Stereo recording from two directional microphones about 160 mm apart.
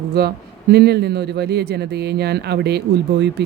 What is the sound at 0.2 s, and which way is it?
Speech, 90° right.